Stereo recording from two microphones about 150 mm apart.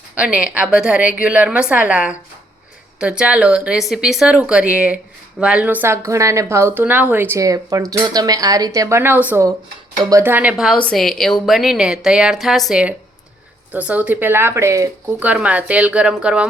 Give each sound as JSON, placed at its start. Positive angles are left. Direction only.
{"t": 0.2, "sound": "a woman's voice", "side_deg": -5}
{"t": 10.8, "sound": "a woman's voice", "side_deg": 5}
{"t": 15.3, "sound": "a woman's voice", "side_deg": -10}